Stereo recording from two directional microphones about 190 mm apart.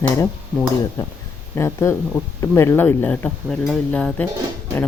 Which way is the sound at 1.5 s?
15° left (ahead or behind).